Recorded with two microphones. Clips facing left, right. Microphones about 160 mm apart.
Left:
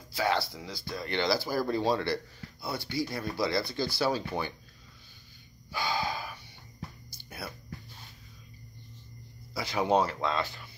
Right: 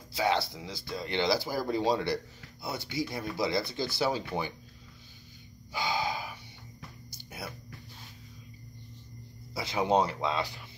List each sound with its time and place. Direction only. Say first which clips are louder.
0.1 s speech: right 1 dB; 20° right (ahead or behind)
5.7 s gasp: even; 20° right (ahead or behind)
7.2 s whispering: even; 20° right (ahead or behind)
9.5 s speech: even; 25° right (ahead or behind)